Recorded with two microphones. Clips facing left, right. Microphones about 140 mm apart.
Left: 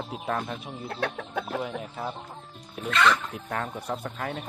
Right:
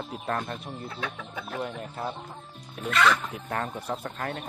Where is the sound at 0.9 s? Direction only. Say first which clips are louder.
Left 8 dB; 60° left (ahead or behind).